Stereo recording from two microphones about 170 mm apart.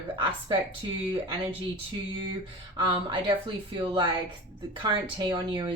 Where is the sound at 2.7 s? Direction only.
30° right (ahead or behind).